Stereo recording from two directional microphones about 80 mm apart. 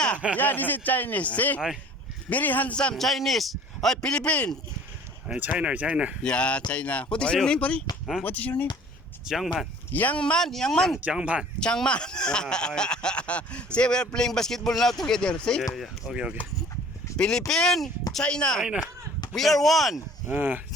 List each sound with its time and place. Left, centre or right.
0.3 s speech: left
2.9 s a man's voice: centre
5.5 s speech: centre
6.2 s speech: centre
9.2 s a man's voice: centre
9.9 s speech: centre
11.0 s speech: centre
11.6 s speech: centre
15.7 s a man's voice: centre
16.1 s speech: centre
17.2 s a man's voice: centre
20.2 s speech: right